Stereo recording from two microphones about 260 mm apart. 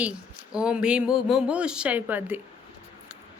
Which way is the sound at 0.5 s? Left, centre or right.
Centre.